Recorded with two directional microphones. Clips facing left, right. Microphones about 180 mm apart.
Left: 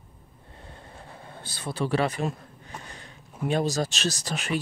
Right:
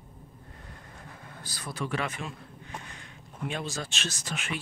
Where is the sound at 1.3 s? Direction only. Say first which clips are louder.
Left 6 dB; 25° left (ahead or behind).